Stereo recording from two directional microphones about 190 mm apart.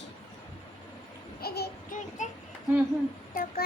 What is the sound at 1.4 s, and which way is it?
Child singing, 55° left (ahead or behind).